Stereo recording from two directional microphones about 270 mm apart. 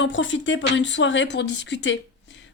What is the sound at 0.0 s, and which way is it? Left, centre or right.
Speech, left.